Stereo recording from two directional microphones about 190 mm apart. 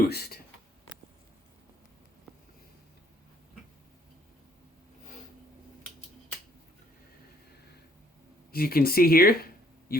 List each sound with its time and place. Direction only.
0.1 s speech: 55° left (ahead or behind)
8.5 s a man's voice: 50° left (ahead or behind)